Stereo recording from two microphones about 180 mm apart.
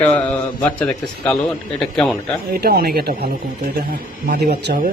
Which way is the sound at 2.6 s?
60° right (ahead or behind).